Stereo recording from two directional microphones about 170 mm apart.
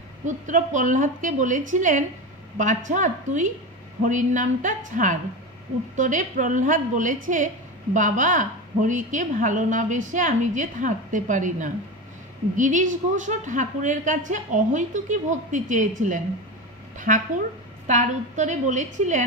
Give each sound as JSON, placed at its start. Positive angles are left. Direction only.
{"t": 0.2, "sound": "a woman's voice", "side_deg": -45}